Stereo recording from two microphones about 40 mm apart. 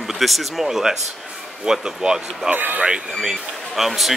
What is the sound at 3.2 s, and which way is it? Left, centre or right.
Speech, centre.